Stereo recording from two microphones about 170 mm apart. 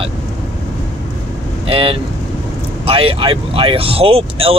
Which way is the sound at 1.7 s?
30° right (ahead or behind).